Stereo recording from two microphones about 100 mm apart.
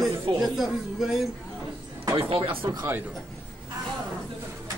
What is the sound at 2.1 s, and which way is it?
Speech, 65° right (ahead or behind).